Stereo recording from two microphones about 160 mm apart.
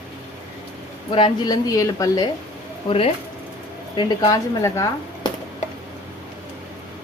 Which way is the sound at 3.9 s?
30° left (ahead or behind).